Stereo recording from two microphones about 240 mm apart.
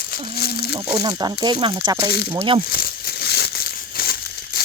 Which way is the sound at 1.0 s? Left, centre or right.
Centre.